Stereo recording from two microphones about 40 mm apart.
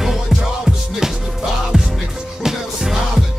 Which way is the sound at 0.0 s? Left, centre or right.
Centre.